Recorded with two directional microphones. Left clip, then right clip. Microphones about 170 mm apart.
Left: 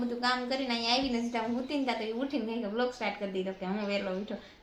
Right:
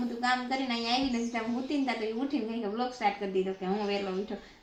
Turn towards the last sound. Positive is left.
turn(degrees=10)  # may be behind; listen again after turning